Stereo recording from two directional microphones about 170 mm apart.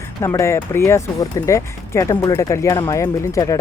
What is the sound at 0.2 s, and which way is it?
Speech, 15° left (ahead or behind).